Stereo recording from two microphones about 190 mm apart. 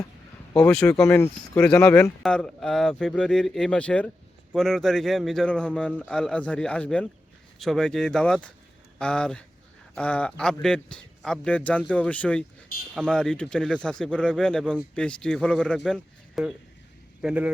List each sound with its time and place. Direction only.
0.5 s speech: 5° left (ahead or behind)